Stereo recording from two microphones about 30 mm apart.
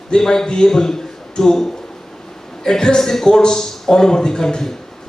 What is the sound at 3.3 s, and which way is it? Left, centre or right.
Speech, left.